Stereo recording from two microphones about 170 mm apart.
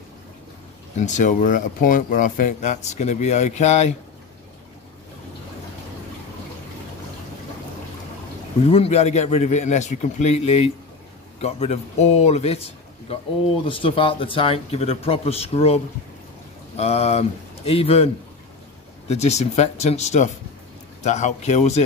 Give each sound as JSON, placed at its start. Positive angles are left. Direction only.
{"t": 0.9, "sound": "speech", "side_deg": 45}
{"t": 8.6, "sound": "speech", "side_deg": 35}
{"t": 13.7, "sound": "speech", "side_deg": 30}